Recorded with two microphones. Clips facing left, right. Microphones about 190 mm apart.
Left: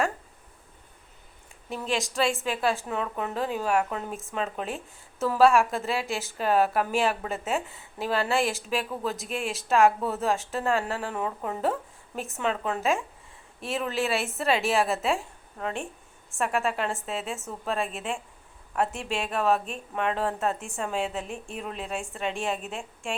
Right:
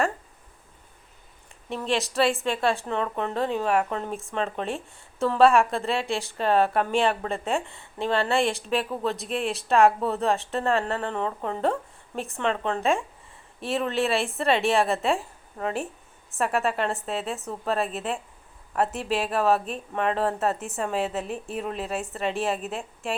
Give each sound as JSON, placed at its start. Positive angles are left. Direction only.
{"t": 1.7, "sound": "speech", "side_deg": 0}